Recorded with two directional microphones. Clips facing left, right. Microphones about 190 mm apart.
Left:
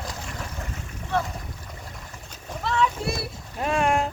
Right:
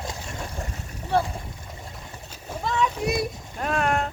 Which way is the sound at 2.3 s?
10° right (ahead or behind).